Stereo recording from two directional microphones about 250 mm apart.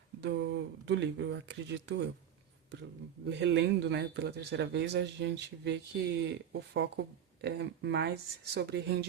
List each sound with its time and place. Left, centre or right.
0.2 s speech: right
3.2 s speech: right